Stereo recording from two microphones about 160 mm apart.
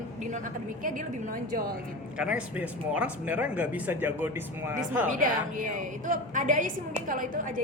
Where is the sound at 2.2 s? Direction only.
5° right (ahead or behind).